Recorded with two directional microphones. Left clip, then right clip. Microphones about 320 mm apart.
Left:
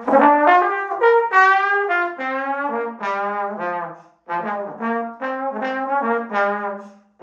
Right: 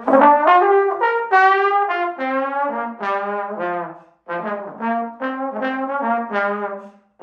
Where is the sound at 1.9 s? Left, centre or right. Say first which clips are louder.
Even; centre.